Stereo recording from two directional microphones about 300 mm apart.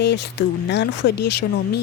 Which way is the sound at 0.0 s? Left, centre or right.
Left.